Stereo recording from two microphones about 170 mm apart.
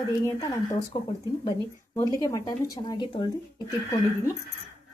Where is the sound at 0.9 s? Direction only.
25° left (ahead or behind).